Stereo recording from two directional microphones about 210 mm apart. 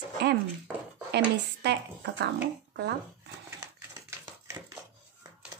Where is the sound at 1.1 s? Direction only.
55° right (ahead or behind).